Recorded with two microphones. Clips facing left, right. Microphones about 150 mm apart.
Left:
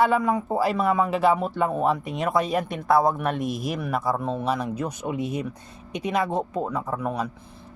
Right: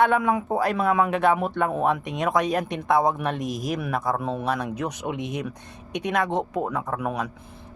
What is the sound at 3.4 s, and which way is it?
Speech, 45° right (ahead or behind).